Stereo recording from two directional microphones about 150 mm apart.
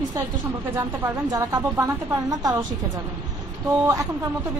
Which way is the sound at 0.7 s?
20° right (ahead or behind).